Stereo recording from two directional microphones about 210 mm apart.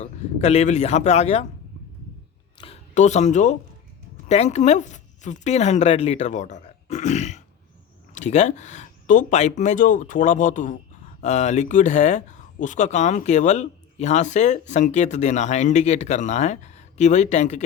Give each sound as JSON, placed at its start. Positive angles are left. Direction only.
{"t": 0.0, "sound": "speech", "side_deg": 30}
{"t": 2.6, "sound": "speech", "side_deg": 30}